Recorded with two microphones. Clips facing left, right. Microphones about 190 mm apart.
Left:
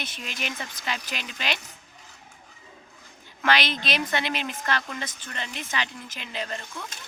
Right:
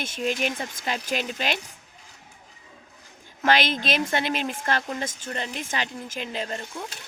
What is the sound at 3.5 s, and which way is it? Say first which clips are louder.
Speech: right 3 dB; 50° right (ahead or behind).